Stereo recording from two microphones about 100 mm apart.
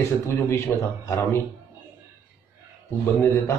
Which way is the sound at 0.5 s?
30° left (ahead or behind).